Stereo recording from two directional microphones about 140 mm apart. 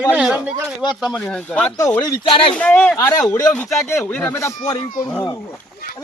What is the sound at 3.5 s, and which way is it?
Speech, 15° left (ahead or behind).